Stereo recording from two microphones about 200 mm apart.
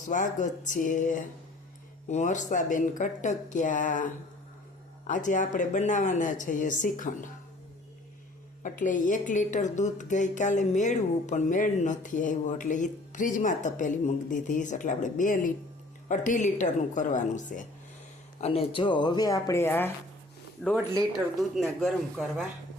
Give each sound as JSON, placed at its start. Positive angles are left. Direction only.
{"t": 0.1, "sound": "a woman's voice", "side_deg": 40}
{"t": 8.6, "sound": "a woman's voice", "side_deg": 40}